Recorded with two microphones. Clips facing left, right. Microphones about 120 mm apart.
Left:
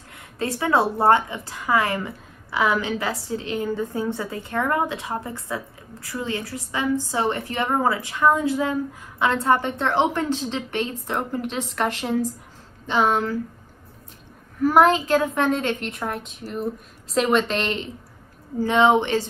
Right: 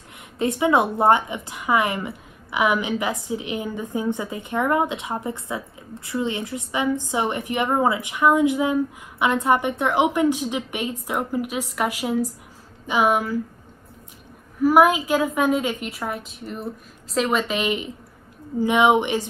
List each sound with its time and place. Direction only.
0.4 s a woman's voice: 20° right (ahead or behind)
14.6 s a woman's voice: 10° right (ahead or behind)